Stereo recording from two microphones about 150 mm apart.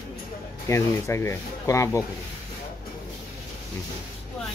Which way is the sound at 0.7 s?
20° left (ahead or behind).